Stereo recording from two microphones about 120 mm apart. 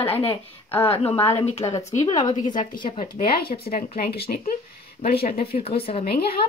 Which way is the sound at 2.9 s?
60° left (ahead or behind).